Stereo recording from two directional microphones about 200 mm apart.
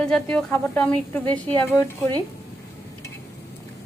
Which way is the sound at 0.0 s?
5° left (ahead or behind).